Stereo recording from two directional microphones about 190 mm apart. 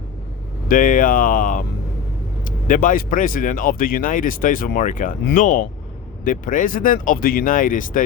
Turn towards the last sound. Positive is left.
turn(degrees=45)  # may be behind; listen again after turning